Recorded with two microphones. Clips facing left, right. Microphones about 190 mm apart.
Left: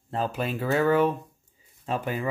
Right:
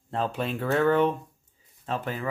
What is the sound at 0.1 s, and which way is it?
Speech, centre (ahead or behind).